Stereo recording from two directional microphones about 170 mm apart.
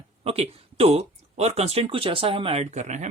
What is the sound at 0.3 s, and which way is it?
Speech, 35° right (ahead or behind).